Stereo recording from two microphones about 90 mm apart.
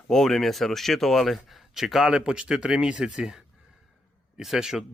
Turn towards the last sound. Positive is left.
turn(degrees=-5)  # may be behind; listen again after turning